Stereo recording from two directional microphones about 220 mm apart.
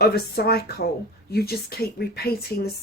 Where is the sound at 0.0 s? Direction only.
45° left (ahead or behind).